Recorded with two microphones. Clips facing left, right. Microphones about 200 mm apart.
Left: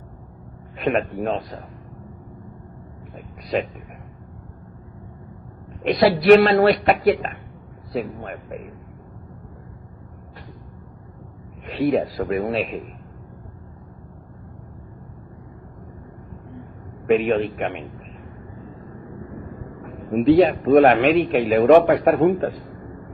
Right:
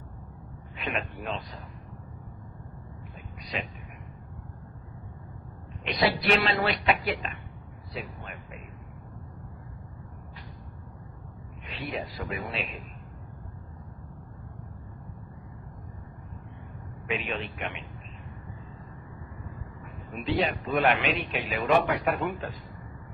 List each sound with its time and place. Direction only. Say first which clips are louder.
0.8 s a man's voice: left 12 dB; 50° left (ahead or behind)
5.8 s a man's voice: left 10 dB; 50° left (ahead or behind)
11.6 s a man's voice: left 15 dB; 50° left (ahead or behind)
17.1 s a man's voice: left 15 dB; 50° left (ahead or behind)
19.8 s a man's voice: left 17 dB; 50° left (ahead or behind)